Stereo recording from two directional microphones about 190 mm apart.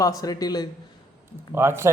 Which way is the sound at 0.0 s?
20° left (ahead or behind).